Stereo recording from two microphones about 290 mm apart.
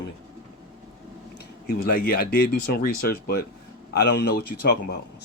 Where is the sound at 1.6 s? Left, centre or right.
Left.